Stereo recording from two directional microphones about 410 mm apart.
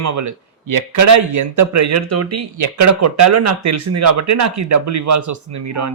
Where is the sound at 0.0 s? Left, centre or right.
Right.